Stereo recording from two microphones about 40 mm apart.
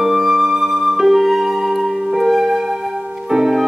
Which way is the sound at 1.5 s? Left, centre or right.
Centre.